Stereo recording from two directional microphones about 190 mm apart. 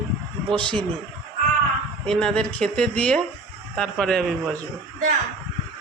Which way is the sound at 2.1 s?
5° left (ahead or behind).